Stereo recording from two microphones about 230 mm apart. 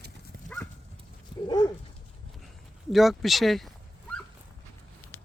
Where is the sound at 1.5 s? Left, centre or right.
Centre.